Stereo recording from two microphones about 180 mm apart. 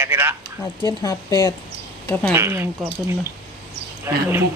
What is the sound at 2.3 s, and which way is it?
Speech, 15° right (ahead or behind).